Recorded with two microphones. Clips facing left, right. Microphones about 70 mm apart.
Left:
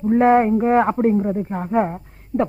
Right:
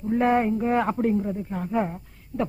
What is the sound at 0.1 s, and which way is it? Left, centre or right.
A man's voice, left.